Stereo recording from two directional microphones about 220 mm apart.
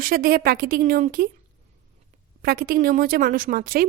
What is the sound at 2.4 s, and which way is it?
A woman's voice, 40° right (ahead or behind).